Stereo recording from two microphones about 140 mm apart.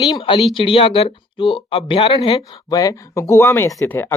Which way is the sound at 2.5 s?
25° left (ahead or behind).